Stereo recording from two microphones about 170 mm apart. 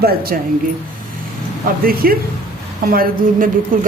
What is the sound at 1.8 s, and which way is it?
A woman's voice, 60° right (ahead or behind).